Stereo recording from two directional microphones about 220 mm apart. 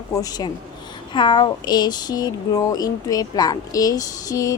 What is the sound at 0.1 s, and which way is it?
Speech, 15° left (ahead or behind).